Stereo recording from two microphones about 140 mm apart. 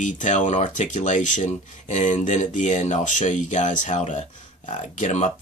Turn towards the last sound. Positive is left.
turn(degrees=55)  # may be behind; listen again after turning